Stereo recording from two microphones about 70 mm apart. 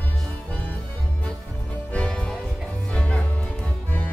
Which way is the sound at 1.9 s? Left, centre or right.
Centre.